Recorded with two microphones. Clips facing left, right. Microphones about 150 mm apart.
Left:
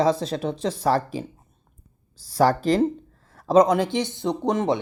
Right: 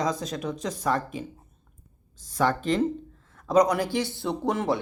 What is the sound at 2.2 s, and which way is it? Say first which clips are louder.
Speech: left 5 dB; 35° left (ahead or behind).